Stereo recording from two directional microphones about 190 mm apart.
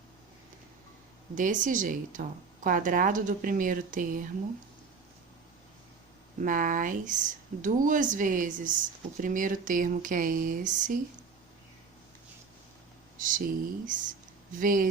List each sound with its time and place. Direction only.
1.4 s speech: 45° right (ahead or behind)
6.4 s speech: 45° right (ahead or behind)
13.1 s speech: 45° right (ahead or behind)